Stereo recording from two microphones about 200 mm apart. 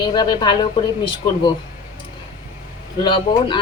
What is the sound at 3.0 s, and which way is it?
Speech, 25° left (ahead or behind).